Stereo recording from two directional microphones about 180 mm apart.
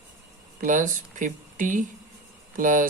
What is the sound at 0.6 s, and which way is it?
Speech, 45° right (ahead or behind).